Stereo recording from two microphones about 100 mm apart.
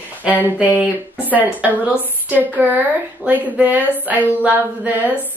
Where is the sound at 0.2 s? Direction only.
15° right (ahead or behind).